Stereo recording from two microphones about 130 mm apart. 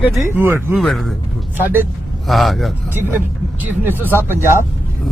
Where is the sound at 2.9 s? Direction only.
15° right (ahead or behind).